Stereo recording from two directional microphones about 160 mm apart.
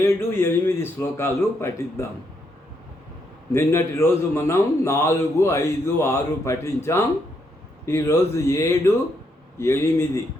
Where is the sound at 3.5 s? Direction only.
15° left (ahead or behind).